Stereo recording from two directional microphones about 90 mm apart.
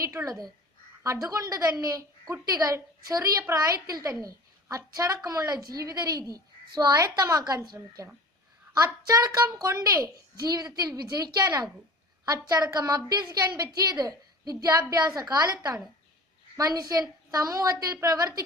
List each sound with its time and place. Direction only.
0.3 s a woman's voice: 45° right (ahead or behind)
8.8 s a woman's voice: 40° right (ahead or behind)